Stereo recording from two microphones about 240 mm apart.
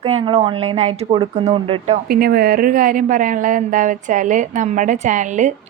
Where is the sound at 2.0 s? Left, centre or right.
Right.